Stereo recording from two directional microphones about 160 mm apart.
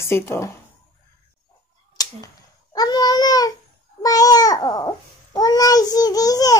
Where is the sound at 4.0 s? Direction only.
25° left (ahead or behind).